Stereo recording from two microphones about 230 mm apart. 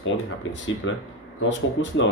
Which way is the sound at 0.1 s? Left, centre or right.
Left.